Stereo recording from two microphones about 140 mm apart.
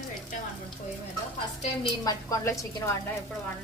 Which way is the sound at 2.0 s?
25° left (ahead or behind).